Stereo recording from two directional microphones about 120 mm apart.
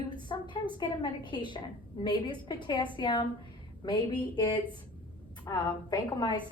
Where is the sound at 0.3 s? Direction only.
40° left (ahead or behind).